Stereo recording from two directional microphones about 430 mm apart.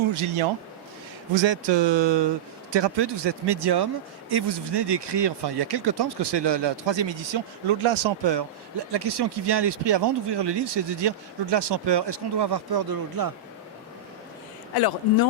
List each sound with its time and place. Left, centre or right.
0.1 s a man's voice: right
1.4 s speech: right
8.9 s speech: right
14.8 s speech: left